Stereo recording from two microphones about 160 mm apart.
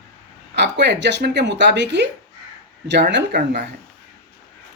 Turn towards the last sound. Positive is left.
turn(degrees=-90)